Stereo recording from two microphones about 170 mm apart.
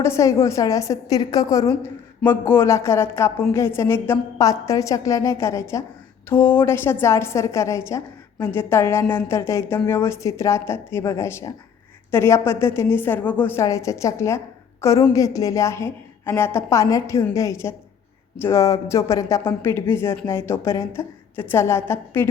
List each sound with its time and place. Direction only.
0.0 s a woman's voice: 15° left (ahead or behind)